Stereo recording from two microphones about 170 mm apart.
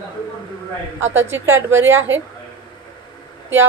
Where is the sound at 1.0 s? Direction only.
90° right.